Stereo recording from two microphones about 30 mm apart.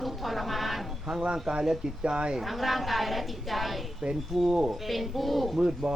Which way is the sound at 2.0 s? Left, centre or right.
Right.